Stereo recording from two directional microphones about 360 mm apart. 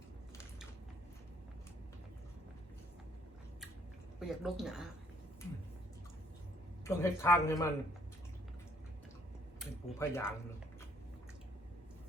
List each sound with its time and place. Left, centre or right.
4.2 s speech: centre
6.8 s a man's voice: centre
9.6 s a sound: centre